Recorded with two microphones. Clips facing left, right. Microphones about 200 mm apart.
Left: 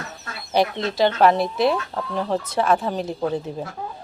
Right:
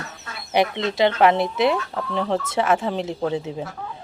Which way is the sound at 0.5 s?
20° right (ahead or behind).